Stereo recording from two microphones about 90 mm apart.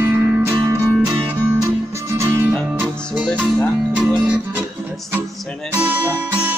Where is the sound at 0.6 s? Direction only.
40° right (ahead or behind).